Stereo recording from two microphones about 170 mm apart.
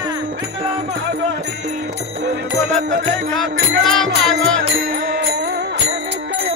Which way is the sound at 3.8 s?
Centre (ahead or behind).